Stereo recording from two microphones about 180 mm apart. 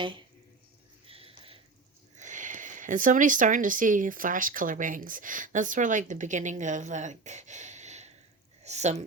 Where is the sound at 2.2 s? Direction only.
45° right (ahead or behind).